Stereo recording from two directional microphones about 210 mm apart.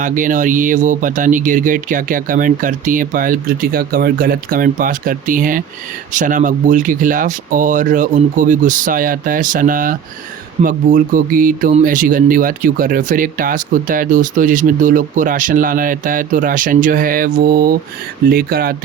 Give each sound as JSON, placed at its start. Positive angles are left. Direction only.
{"t": 0.0, "sound": "speech", "side_deg": -40}